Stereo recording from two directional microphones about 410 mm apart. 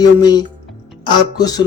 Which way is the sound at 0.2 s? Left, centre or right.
Centre.